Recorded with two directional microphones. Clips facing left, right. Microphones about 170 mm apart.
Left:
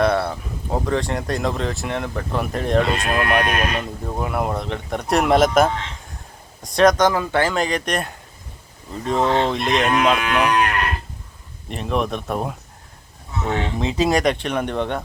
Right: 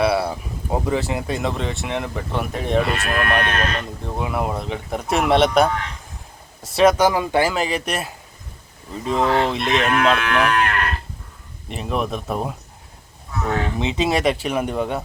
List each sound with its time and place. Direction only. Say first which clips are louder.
0.0 s speech: even; 10° right (ahead or behind)
2.8 s speech: left 1 dB; 20° left (ahead or behind)
4.2 s speech: left 1 dB; centre (ahead or behind)
9.2 s speech: even; 25° left (ahead or behind)
9.5 s speech: left 1 dB; centre (ahead or behind)
9.8 s speech: even; 15° left (ahead or behind)
11.7 s speech: left 1 dB; centre (ahead or behind)
13.4 s speech: even; 20° left (ahead or behind)
14.1 s speech: left 1 dB; 5° right (ahead or behind)